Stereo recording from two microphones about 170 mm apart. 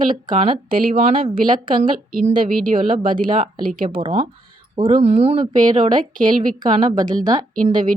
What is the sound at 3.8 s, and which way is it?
Speech, 30° right (ahead or behind).